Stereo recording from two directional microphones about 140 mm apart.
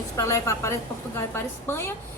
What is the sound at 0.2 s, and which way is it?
A woman's voice, 20° left (ahead or behind).